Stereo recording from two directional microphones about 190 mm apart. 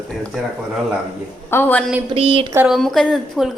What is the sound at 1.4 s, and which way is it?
Speech, 10° left (ahead or behind).